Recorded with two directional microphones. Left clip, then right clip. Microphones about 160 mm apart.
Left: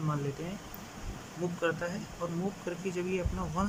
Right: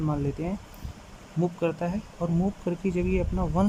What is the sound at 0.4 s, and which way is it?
Speech, 30° right (ahead or behind).